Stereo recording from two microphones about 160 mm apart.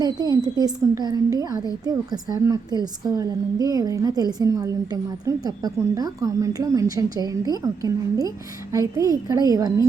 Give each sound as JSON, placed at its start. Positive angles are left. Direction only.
{"t": 0.0, "sound": "a woman's voice", "side_deg": -25}